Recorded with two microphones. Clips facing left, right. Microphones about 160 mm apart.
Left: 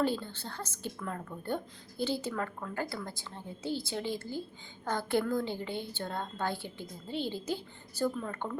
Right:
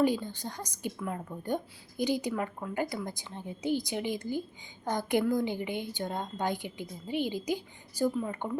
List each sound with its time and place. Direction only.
0.0 s a woman's voice: 15° right (ahead or behind)